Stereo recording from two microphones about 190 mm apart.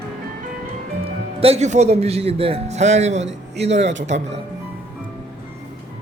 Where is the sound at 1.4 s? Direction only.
35° right (ahead or behind).